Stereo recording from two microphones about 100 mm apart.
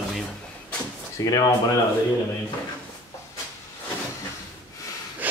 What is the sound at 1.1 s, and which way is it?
Speech, 35° left (ahead or behind).